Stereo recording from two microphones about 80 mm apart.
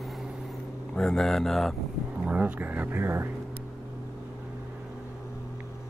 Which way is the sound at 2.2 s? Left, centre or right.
Centre.